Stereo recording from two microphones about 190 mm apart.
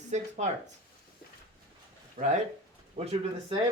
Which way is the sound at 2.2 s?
45° right (ahead or behind).